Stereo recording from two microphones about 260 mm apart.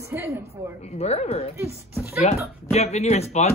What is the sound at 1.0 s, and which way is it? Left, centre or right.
Speech, left.